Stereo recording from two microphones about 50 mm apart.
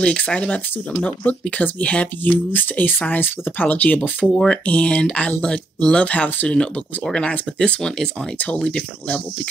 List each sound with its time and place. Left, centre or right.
0.0 s speech: left
2.2 s speech: left
4.3 s speech: centre